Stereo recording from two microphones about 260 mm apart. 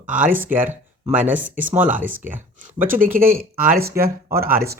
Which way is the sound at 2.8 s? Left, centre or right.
Right.